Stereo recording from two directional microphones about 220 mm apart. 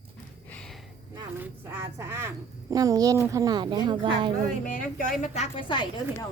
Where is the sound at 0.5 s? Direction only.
5° left (ahead or behind).